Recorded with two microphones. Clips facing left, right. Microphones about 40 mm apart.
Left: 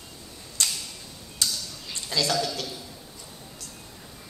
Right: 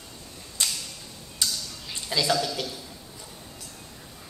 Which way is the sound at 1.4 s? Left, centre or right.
Centre.